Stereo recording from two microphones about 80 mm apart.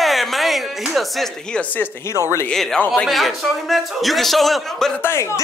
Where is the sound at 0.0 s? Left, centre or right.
Centre.